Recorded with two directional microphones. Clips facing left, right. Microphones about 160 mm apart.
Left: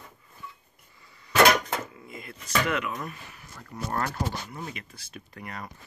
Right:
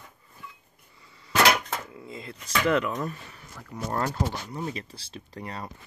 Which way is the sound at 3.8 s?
20° right (ahead or behind).